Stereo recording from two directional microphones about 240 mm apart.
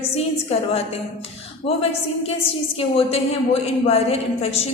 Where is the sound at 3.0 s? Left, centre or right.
Left.